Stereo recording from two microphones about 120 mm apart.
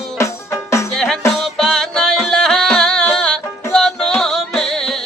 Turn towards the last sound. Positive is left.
turn(degrees=5)  # may be behind; listen again after turning